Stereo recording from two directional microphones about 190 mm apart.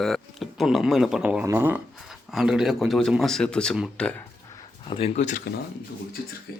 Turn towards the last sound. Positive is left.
turn(degrees=40)  # may be behind; listen again after turning